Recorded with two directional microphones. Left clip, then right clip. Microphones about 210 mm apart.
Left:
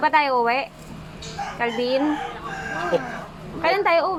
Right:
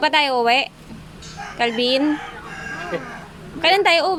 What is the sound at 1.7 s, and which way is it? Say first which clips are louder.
Speech: right 3 dB; 10° right (ahead or behind).